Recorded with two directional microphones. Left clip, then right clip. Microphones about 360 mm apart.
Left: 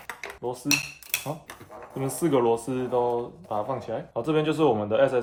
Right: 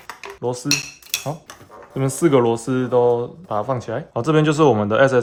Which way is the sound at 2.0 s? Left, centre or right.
Right.